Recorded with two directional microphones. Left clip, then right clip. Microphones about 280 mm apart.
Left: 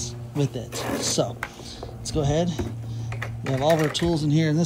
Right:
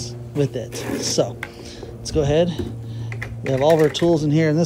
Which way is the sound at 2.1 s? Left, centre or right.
Left.